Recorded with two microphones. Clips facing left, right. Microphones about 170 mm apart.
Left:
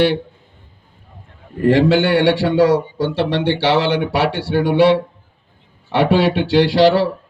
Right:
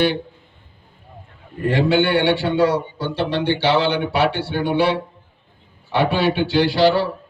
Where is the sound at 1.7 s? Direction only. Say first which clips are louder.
Left 3 dB; 90° left.